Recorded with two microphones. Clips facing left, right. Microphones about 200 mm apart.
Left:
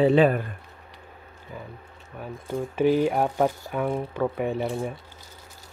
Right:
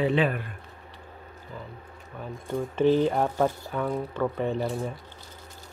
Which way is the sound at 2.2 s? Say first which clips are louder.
Left 1 dB; 5° left (ahead or behind).